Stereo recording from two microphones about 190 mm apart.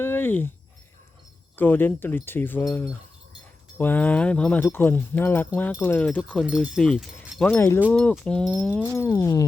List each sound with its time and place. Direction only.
0.0 s a sound: 10° left (ahead or behind)
1.5 s speech: 10° left (ahead or behind)
7.5 s speech: 10° left (ahead or behind)
9.0 s speech: 15° left (ahead or behind)